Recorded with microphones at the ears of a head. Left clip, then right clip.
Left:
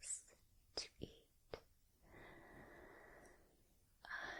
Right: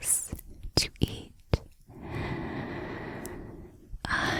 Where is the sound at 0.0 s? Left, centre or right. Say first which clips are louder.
Right 19 dB; right.